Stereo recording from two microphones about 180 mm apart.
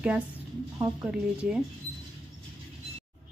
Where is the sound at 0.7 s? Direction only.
15° right (ahead or behind).